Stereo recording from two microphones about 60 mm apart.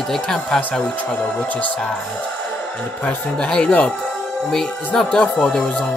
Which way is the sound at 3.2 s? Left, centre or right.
Centre.